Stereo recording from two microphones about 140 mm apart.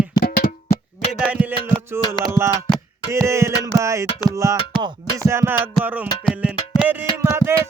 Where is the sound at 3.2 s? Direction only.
20° right (ahead or behind).